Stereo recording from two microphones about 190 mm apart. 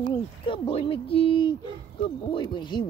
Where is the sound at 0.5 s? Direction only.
30° left (ahead or behind).